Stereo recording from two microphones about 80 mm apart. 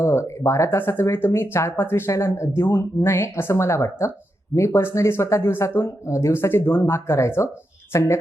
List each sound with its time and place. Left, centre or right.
0.0 s speech: left